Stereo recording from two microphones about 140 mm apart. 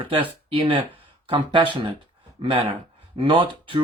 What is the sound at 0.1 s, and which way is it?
Speech, 40° right (ahead or behind).